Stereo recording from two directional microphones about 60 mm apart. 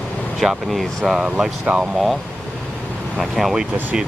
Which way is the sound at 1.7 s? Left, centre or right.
Right.